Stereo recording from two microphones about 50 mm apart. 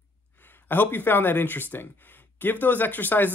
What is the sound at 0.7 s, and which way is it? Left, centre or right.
Speech, left.